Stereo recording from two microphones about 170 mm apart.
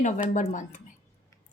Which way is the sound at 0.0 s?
45° left (ahead or behind).